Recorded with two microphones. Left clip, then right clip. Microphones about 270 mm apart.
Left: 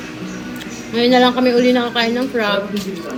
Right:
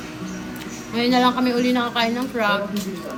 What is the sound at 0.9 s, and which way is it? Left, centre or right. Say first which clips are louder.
A woman's voice: left 6 dB; centre.